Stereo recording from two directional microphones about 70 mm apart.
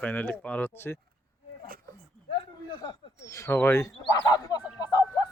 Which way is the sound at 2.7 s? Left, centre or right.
Left.